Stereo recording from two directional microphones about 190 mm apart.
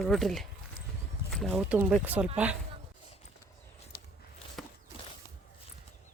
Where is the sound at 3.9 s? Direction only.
50° left (ahead or behind).